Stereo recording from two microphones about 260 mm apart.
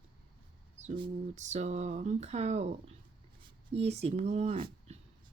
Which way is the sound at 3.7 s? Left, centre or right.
Right.